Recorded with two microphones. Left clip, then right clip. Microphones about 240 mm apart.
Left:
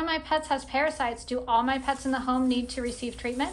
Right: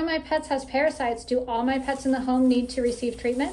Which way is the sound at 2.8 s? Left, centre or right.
Left.